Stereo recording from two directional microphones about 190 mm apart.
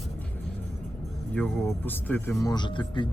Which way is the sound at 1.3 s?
10° left (ahead or behind).